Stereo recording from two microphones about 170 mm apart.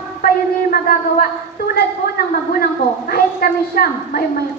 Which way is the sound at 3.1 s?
60° left (ahead or behind).